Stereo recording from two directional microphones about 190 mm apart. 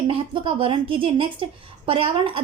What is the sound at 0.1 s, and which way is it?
A woman's voice, 30° right (ahead or behind).